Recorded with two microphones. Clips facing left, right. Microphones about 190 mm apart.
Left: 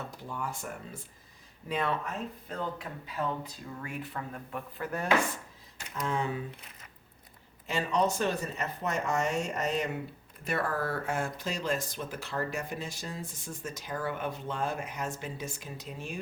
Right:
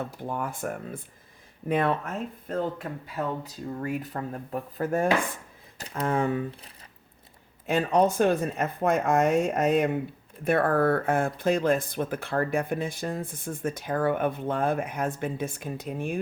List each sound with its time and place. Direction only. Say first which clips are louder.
0.0 s speech: right 6 dB; 55° right (ahead or behind); by 5.9 s 35° right (ahead or behind)
5.9 s speech: right 6 dB; 55° right (ahead or behind)
7.7 s speech: right 6 dB; 55° right (ahead or behind)